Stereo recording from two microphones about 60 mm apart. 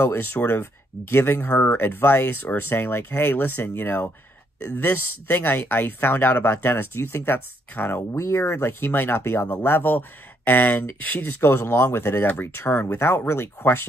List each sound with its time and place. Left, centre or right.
0.0 s speech: left
8.1 s speech: left
11.4 s speech: left